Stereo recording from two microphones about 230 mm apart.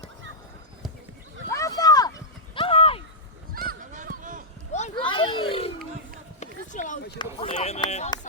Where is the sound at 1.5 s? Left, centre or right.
Centre.